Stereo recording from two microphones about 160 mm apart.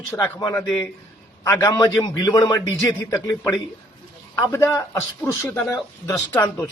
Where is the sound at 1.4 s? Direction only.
15° left (ahead or behind).